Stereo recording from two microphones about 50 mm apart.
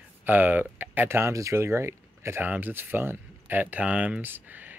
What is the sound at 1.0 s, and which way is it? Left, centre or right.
Speech, right.